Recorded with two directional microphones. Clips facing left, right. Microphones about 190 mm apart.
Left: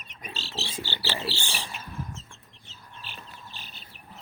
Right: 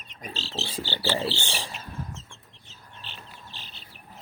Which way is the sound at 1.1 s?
25° right (ahead or behind).